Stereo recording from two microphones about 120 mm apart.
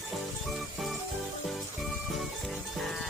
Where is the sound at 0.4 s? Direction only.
Centre (ahead or behind).